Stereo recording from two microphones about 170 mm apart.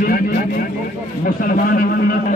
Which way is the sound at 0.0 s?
60° left (ahead or behind).